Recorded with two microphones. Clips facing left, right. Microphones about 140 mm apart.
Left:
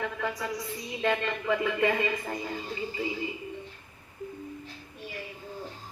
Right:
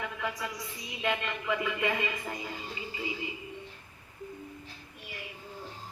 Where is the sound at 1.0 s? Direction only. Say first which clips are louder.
Left 4 dB; 45° left (ahead or behind).